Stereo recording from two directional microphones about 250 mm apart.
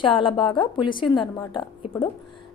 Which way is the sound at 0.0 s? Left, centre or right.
Left.